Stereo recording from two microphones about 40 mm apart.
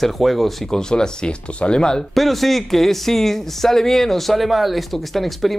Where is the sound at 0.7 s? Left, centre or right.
Centre.